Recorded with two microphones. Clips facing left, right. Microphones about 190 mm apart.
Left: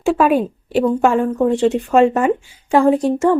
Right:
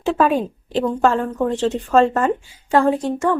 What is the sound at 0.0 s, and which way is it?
A woman's voice, 10° left (ahead or behind).